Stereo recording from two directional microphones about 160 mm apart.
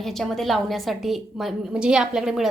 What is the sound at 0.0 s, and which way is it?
A woman's voice, centre (ahead or behind).